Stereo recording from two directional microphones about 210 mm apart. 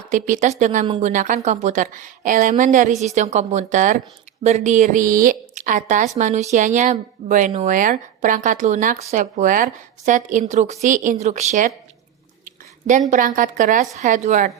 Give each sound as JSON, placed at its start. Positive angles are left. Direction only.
{"t": 0.1, "sound": "a woman's voice", "side_deg": -35}
{"t": 13.1, "sound": "a woman's voice", "side_deg": -40}